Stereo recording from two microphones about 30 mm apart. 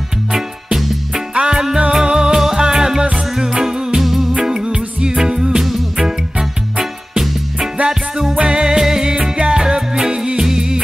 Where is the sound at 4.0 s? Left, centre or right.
Centre.